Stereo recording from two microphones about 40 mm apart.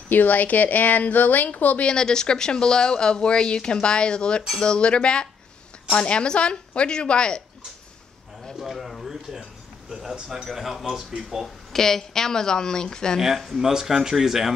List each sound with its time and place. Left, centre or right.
0.1 s speech: left
1.9 s speech: centre
8.5 s a sound: centre
10.1 s speech: centre
11.4 s a woman's voice: centre
13.5 s speech: centre